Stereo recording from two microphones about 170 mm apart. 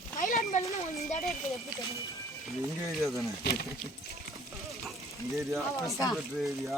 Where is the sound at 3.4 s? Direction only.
70° left (ahead or behind).